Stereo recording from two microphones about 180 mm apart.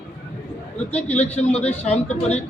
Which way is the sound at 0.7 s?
10° left (ahead or behind).